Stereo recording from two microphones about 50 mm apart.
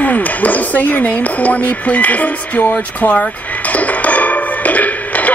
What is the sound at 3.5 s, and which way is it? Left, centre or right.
Music, left.